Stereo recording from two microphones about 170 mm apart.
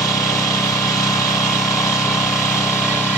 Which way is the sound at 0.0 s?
20° left (ahead or behind).